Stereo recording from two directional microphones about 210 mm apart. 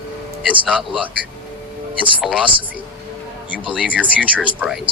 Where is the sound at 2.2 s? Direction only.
5° right (ahead or behind).